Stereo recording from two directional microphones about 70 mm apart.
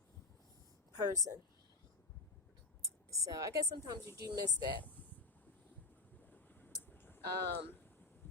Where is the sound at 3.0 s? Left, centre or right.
Right.